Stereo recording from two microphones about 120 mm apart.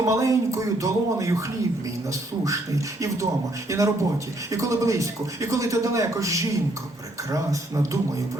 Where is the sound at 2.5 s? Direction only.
25° right (ahead or behind).